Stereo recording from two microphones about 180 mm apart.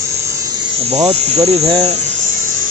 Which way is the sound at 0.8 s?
35° right (ahead or behind).